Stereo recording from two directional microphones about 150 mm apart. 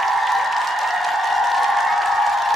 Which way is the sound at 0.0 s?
Centre (ahead or behind).